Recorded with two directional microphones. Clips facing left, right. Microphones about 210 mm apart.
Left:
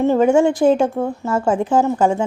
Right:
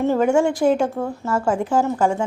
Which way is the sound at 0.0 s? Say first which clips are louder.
Left 4 dB; 20° left (ahead or behind).